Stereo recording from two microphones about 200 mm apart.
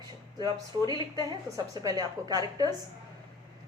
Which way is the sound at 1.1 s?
20° right (ahead or behind).